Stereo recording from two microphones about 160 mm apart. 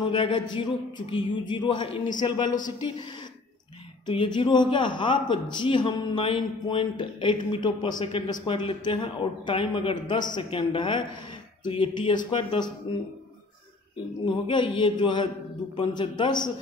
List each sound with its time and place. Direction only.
0.0 s a man's voice: 30° left (ahead or behind)
4.0 s a man's voice: 30° left (ahead or behind)
14.2 s a man's voice: 30° left (ahead or behind)